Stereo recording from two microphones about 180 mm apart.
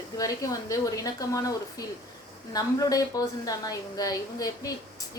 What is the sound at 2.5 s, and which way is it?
A woman's voice, 20° left (ahead or behind).